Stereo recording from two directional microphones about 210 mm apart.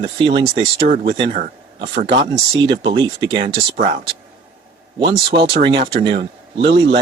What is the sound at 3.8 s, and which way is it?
Speech, 30° right (ahead or behind).